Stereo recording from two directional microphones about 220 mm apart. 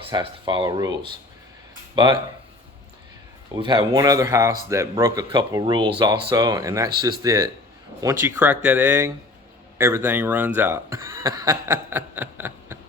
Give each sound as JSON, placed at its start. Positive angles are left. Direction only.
{"t": 0.0, "sound": "speech", "side_deg": -25}
{"t": 2.0, "sound": "speech", "side_deg": -20}
{"t": 3.5, "sound": "speech", "side_deg": -20}